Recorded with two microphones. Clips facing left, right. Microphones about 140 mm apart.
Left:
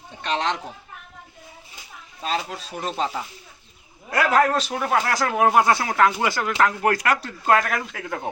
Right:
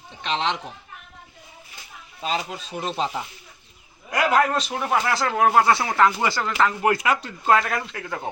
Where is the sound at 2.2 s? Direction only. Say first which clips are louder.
Even; 5° right (ahead or behind).